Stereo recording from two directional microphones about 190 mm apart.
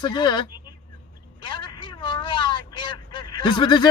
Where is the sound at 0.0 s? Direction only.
20° left (ahead or behind).